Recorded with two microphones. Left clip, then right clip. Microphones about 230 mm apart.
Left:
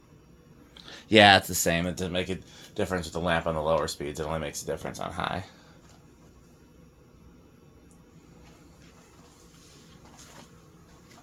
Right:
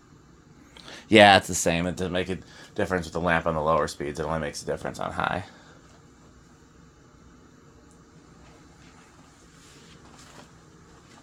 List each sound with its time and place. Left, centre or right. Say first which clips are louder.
0.7 s speech: right 3 dB; right